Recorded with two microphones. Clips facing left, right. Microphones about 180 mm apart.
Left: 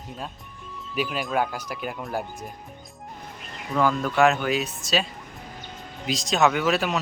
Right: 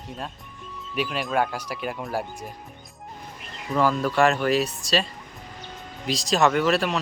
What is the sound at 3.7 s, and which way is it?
Speech, centre (ahead or behind).